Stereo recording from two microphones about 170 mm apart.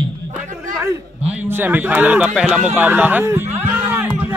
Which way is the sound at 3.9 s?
10° right (ahead or behind).